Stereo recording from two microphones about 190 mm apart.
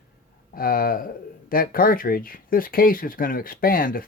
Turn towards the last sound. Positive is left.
turn(degrees=50)  # may be behind; listen again after turning